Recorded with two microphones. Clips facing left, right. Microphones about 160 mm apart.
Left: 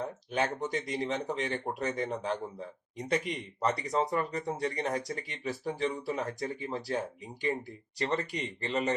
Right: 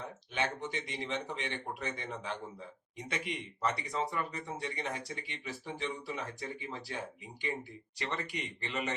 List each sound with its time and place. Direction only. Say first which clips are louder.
0.0 s speech: left 5 dB; 40° left (ahead or behind)